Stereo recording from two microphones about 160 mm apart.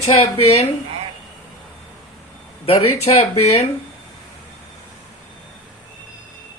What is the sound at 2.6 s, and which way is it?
Speech, 40° left (ahead or behind).